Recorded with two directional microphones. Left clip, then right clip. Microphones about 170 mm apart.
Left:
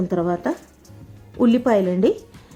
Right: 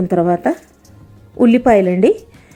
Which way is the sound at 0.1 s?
25° right (ahead or behind).